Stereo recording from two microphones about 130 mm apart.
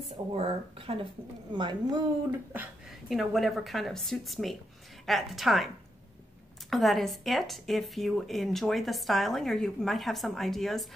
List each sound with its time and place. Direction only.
0.3 s a woman's voice: 45° right (ahead or behind)
2.9 s speech: centre (ahead or behind)
6.7 s speech: centre (ahead or behind)